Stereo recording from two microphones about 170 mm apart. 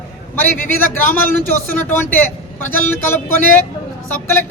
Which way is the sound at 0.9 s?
10° left (ahead or behind).